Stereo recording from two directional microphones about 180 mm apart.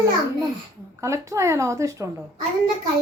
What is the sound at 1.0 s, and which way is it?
Speech, 15° right (ahead or behind).